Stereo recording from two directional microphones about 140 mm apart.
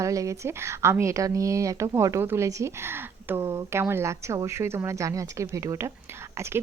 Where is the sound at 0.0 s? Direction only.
20° right (ahead or behind).